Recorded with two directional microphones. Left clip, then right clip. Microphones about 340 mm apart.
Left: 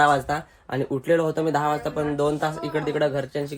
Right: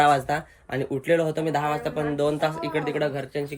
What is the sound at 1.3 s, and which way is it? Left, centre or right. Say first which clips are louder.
Speech: left 2 dB; centre.